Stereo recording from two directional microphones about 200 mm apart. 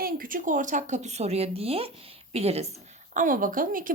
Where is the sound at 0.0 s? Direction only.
45° right (ahead or behind).